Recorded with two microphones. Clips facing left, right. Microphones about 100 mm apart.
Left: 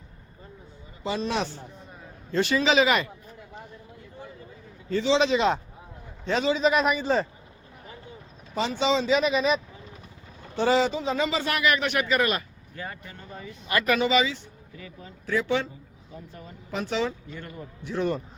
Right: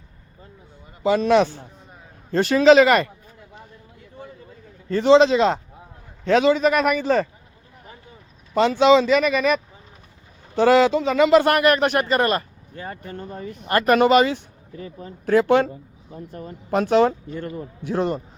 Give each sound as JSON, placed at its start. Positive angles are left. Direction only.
{"t": 1.0, "sound": "a man's voice", "side_deg": -55}
{"t": 2.3, "sound": "speech", "side_deg": -45}
{"t": 4.9, "sound": "speech", "side_deg": -50}
{"t": 6.2, "sound": "a man's voice", "side_deg": -65}
{"t": 8.5, "sound": "a man's voice", "side_deg": -65}
{"t": 10.6, "sound": "speech", "side_deg": -70}
{"t": 11.5, "sound": "speech", "side_deg": -50}
{"t": 14.8, "sound": "speech", "side_deg": -40}
{"t": 15.3, "sound": "a man's voice", "side_deg": -55}